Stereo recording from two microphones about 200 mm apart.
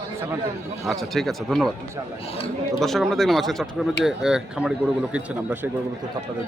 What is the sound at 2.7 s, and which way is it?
Speech, centre (ahead or behind).